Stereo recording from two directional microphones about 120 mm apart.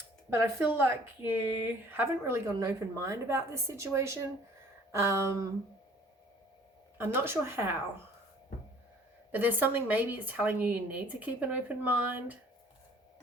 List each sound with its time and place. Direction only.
0.3 s a woman's voice: 20° right (ahead or behind)
7.0 s a woman's voice: 20° right (ahead or behind)
9.3 s a woman's voice: 15° right (ahead or behind)